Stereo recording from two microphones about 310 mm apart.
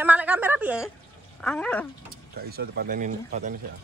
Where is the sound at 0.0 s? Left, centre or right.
Centre.